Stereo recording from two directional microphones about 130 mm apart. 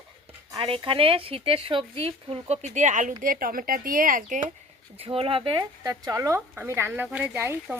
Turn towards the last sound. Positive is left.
turn(degrees=-15)  # may be behind; listen again after turning